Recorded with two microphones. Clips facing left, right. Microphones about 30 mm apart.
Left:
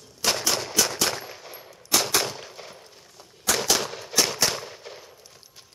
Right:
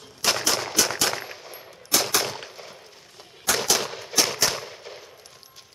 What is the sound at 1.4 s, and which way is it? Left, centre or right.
Machine gun, centre.